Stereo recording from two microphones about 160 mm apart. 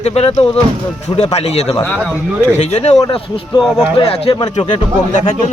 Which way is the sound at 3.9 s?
35° left (ahead or behind).